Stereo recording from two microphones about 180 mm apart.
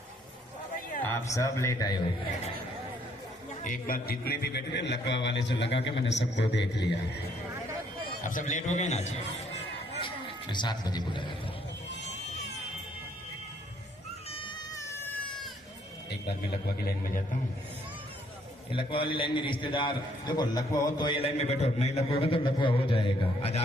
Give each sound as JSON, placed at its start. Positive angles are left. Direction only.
{"t": 1.0, "sound": "speech", "side_deg": 15}
{"t": 3.6, "sound": "a man's voice", "side_deg": 50}
{"t": 8.2, "sound": "a man's voice", "side_deg": 45}
{"t": 10.5, "sound": "a man's voice", "side_deg": 25}
{"t": 14.3, "sound": "a sound", "side_deg": 30}
{"t": 14.8, "sound": "cat", "side_deg": 15}
{"t": 16.8, "sound": "a man's voice", "side_deg": 55}
{"t": 18.7, "sound": "a man's voice", "side_deg": 30}